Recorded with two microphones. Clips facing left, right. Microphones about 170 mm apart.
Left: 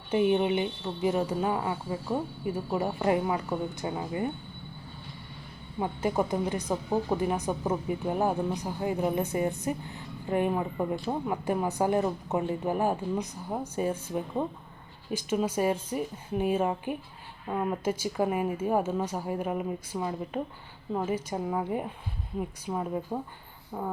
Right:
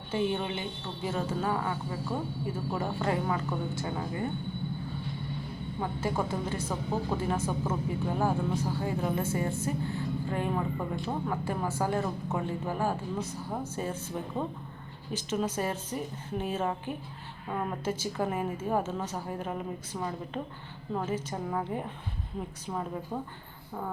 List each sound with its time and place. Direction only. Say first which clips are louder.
0.1 s speech: left 6 dB; 15° left (ahead or behind)
5.8 s speech: left 4 dB; 15° left (ahead or behind)